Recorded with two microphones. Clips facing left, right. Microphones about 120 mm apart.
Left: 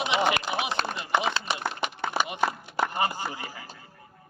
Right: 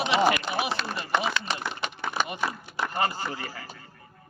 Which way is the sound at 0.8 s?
45° left (ahead or behind).